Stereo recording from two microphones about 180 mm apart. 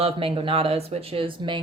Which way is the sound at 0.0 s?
30° right (ahead or behind).